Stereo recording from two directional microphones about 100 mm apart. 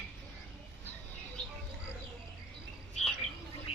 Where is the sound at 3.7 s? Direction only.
90° left.